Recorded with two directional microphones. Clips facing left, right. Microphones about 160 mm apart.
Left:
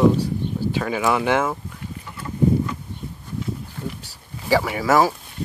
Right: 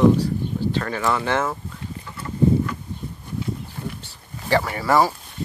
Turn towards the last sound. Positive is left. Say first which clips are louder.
# left 1 dB
turn(degrees=10)  # may be behind; listen again after turning